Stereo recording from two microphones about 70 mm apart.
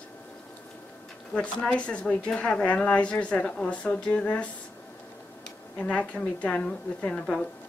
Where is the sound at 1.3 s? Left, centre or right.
Centre.